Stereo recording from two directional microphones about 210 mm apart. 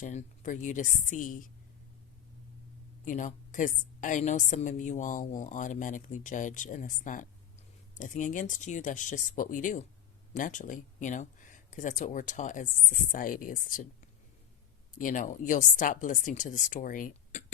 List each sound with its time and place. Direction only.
0.0 s a woman's voice: 35° left (ahead or behind)
3.0 s a woman's voice: 35° left (ahead or behind)
14.9 s a woman's voice: 40° left (ahead or behind)